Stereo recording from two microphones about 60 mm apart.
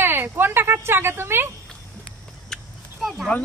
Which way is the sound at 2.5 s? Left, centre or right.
Centre.